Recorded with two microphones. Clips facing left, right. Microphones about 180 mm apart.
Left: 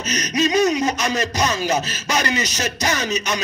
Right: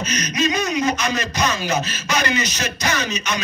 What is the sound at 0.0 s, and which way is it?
Speech, 40° left (ahead or behind).